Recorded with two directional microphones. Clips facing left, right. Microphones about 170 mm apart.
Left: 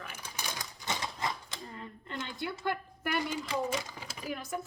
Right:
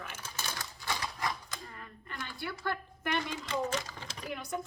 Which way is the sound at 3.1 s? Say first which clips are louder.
Left 1 dB; 5° left (ahead or behind).